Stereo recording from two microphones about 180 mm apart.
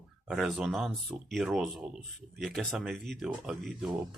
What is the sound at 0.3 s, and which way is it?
Speech, centre (ahead or behind).